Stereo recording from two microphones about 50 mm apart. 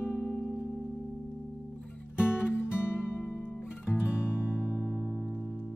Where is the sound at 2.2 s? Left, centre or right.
Left.